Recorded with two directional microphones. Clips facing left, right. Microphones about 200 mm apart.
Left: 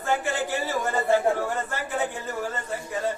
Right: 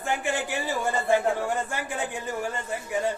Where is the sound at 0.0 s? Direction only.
15° right (ahead or behind).